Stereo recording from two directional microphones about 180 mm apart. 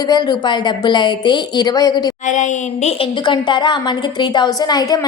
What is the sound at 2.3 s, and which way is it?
Speech, 45° left (ahead or behind).